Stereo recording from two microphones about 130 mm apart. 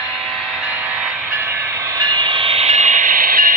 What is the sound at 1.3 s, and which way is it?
Train, 15° right (ahead or behind).